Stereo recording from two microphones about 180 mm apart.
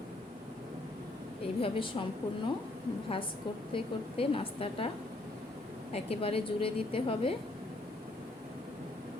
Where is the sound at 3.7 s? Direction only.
30° left (ahead or behind).